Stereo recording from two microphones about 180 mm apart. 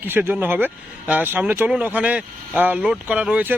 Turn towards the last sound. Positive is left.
turn(degrees=-10)  # may be behind; listen again after turning